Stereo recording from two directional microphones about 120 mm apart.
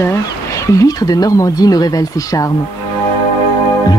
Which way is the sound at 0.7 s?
30° left (ahead or behind).